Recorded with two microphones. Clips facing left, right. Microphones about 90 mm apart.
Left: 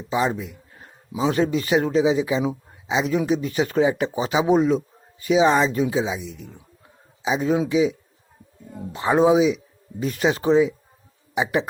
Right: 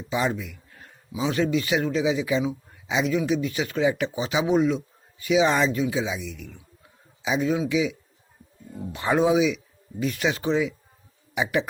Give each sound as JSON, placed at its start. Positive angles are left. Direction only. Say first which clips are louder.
{"t": 0.1, "sound": "speech", "louder": "left 3 dB", "side_deg": 25}
{"t": 1.1, "sound": "speech", "louder": "left 3 dB", "side_deg": 40}